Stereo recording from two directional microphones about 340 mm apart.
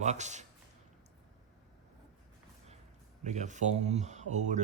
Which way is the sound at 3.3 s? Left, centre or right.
Right.